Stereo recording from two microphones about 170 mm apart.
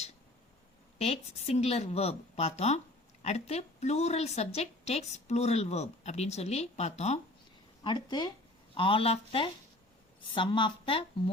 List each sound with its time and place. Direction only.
0.9 s a woman's voice: 40° left (ahead or behind)
7.9 s a woman's voice: 25° left (ahead or behind)